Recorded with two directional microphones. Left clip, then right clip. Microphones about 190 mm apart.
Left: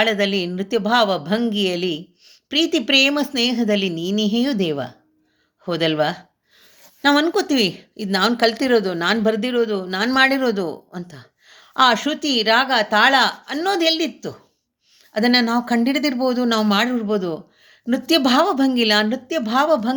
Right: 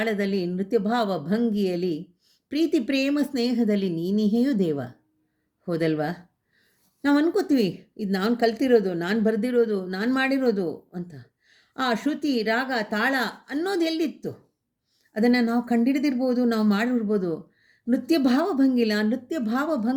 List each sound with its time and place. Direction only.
0.0 s speech: 15° right (ahead or behind)